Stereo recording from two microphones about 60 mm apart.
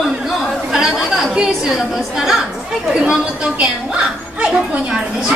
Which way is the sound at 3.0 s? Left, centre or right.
Centre.